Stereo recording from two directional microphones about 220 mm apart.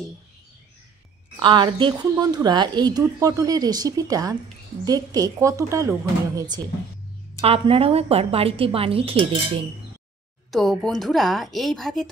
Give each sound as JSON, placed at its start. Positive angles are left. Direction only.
{"t": 1.4, "sound": "a woman's voice", "side_deg": -20}
{"t": 10.5, "sound": "a woman's voice", "side_deg": 0}